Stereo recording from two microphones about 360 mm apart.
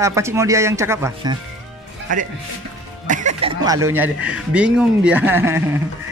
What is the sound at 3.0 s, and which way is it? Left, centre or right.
Speech, right.